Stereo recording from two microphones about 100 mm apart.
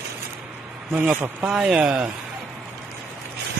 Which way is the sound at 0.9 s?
20° right (ahead or behind).